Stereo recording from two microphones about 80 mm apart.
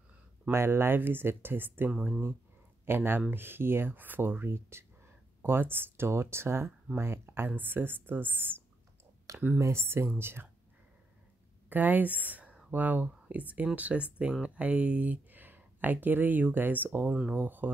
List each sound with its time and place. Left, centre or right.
0.5 s speech: right
9.6 s speech: right
11.7 s speech: right